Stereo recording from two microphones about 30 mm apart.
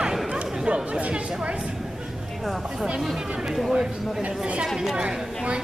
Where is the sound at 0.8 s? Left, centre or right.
Right.